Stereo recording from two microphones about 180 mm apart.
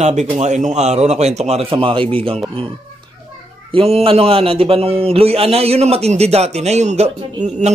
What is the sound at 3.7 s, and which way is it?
A man's voice, 30° right (ahead or behind).